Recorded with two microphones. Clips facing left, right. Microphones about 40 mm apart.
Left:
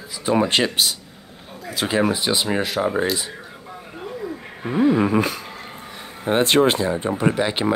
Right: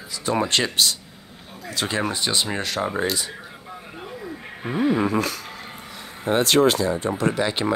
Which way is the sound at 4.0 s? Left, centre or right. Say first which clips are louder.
Left 6 dB; centre.